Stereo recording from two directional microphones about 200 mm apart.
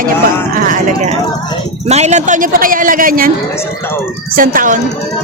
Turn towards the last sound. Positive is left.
turn(degrees=-45)  # may be behind; listen again after turning